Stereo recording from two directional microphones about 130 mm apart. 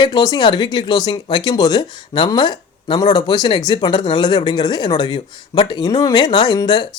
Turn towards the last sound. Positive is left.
turn(degrees=30)  # may be behind; listen again after turning